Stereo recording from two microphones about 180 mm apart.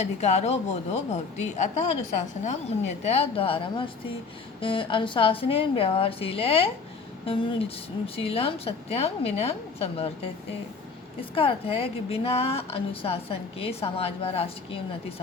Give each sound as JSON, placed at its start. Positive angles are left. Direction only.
{"t": 0.0, "sound": "a woman's voice", "side_deg": 40}
{"t": 11.2, "sound": "a woman's voice", "side_deg": 30}